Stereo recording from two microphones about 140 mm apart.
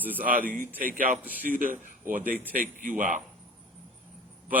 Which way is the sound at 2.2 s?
10° right (ahead or behind).